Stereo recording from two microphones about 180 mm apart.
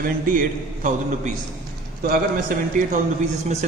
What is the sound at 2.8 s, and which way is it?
Speech, 45° right (ahead or behind).